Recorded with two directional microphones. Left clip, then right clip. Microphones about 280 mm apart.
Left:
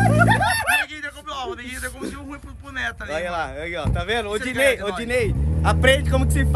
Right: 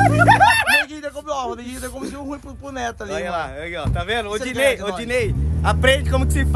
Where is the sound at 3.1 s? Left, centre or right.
Centre.